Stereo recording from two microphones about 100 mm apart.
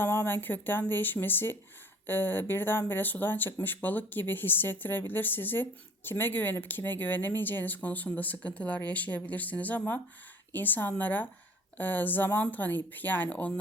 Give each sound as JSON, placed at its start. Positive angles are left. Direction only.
{"t": 0.0, "sound": "speech", "side_deg": 25}